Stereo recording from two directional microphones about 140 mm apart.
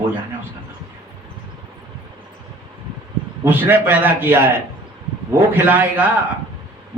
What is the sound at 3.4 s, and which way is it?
A man's voice, 15° right (ahead or behind).